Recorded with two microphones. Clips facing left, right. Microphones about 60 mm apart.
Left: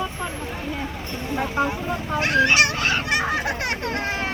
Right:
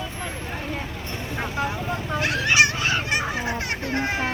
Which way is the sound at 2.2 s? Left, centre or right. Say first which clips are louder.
Left 2 dB; left.